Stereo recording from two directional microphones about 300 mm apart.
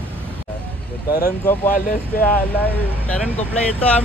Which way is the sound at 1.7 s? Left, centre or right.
Left.